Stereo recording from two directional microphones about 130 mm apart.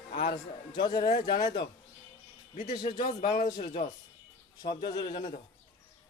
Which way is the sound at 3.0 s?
80° left.